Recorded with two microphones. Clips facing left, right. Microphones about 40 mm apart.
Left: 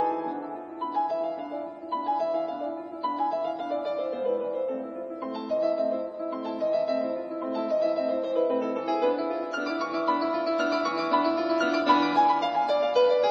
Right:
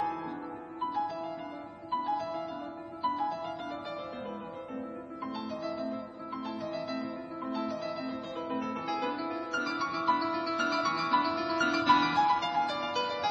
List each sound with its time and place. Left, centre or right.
2.0 s music: centre
4.2 s music: left
6.7 s music: centre